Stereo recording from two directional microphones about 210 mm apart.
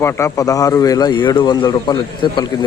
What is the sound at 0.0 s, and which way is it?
A man's voice, 15° left (ahead or behind).